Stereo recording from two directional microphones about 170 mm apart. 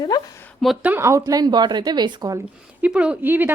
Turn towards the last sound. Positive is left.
turn(degrees=-10)  # may be behind; listen again after turning